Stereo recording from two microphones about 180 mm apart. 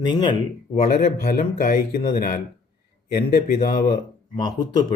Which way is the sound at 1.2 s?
50° left (ahead or behind).